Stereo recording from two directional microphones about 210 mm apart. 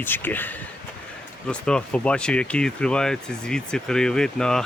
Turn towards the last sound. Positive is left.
turn(degrees=5)  # may be behind; listen again after turning